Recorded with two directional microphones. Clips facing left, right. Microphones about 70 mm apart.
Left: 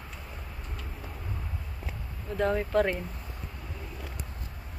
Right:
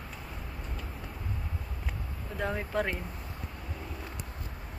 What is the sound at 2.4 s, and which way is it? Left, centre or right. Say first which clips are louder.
Speech: left 6 dB; centre.